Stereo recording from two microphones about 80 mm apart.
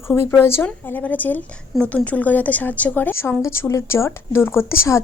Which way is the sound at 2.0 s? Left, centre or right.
Centre.